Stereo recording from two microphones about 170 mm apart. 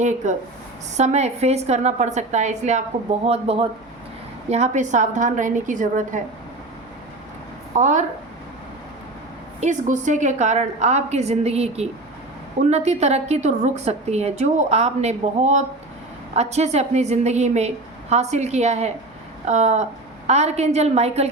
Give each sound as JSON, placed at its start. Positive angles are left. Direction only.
{"t": 0.0, "sound": "a woman's voice", "side_deg": -45}
{"t": 7.8, "sound": "a woman's voice", "side_deg": -45}
{"t": 9.6, "sound": "a woman's voice", "side_deg": -45}